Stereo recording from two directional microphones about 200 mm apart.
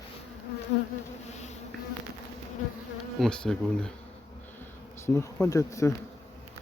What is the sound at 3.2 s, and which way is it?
Speech, 5° left (ahead or behind).